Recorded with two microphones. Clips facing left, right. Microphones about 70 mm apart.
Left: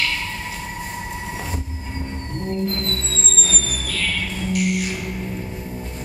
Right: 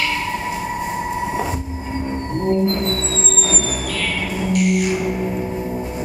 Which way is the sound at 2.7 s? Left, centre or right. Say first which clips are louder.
Right 6 dB; centre.